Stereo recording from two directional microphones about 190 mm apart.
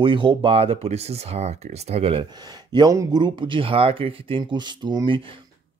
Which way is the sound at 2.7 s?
20° right (ahead or behind).